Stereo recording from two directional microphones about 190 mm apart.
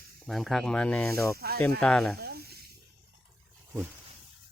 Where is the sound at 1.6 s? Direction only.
5° left (ahead or behind).